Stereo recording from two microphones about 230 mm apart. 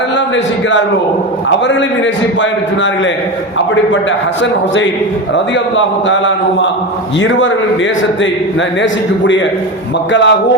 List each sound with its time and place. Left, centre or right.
5.7 s a man's voice: left
8.8 s speech: left